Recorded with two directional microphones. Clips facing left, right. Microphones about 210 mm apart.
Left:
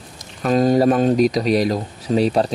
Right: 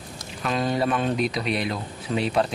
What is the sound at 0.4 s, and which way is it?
Speech, 40° left (ahead or behind).